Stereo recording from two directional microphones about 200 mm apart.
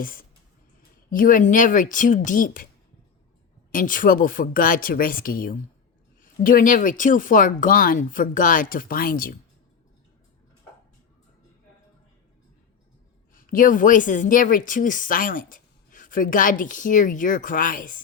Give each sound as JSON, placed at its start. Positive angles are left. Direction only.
{"t": 0.0, "sound": "a woman's voice", "side_deg": 45}
{"t": 3.7, "sound": "speech", "side_deg": 40}
{"t": 13.3, "sound": "a woman's voice", "side_deg": 40}